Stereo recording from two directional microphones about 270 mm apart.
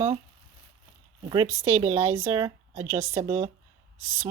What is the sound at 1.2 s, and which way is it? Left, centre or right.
Speech, centre.